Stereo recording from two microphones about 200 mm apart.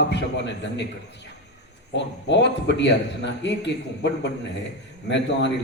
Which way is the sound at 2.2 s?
60° left (ahead or behind).